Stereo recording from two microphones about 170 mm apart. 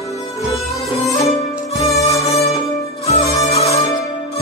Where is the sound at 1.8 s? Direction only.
20° left (ahead or behind).